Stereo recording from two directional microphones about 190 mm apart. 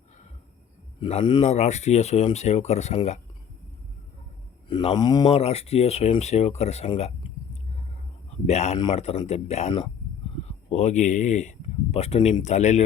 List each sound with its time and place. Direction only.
0.9 s speech: 25° left (ahead or behind)
4.7 s speech: 25° left (ahead or behind)
5.3 s speech: 30° left (ahead or behind)
8.4 s speech: 35° left (ahead or behind)